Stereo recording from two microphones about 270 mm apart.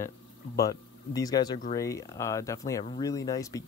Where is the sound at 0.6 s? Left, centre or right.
Centre.